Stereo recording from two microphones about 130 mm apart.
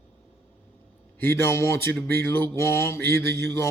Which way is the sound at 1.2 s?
20° left (ahead or behind).